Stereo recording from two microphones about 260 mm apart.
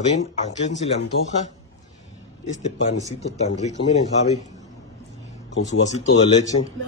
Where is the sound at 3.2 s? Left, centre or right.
Left.